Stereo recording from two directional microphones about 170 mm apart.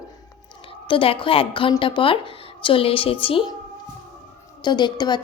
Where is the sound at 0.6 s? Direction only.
30° left (ahead or behind).